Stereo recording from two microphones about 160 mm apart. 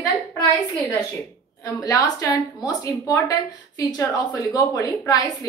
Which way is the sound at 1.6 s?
20° left (ahead or behind).